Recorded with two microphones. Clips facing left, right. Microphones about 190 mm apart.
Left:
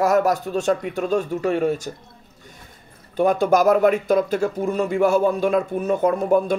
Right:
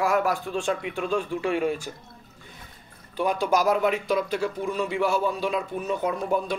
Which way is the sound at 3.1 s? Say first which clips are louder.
Left 6 dB; 45° left (ahead or behind).